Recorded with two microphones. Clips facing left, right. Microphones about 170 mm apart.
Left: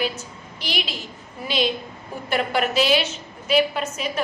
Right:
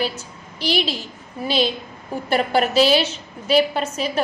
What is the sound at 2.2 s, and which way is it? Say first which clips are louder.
A woman's voice: right 3 dB; 35° right (ahead or behind).